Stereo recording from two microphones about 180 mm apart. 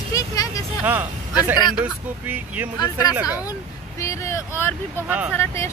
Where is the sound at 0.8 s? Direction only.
10° right (ahead or behind).